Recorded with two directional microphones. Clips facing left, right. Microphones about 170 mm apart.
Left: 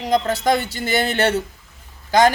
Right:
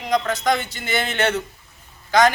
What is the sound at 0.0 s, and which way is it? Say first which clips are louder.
Speech: left 2 dB; 35° left (ahead or behind).